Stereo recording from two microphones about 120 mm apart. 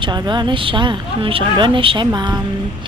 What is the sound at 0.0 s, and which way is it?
A woman's voice, 40° right (ahead or behind).